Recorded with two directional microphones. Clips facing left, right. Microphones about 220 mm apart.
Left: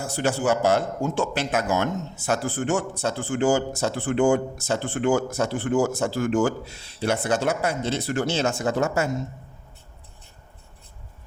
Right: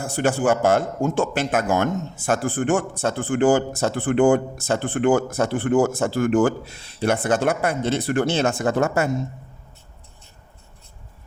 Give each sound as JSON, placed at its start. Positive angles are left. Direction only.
{"t": 0.0, "sound": "speech", "side_deg": -55}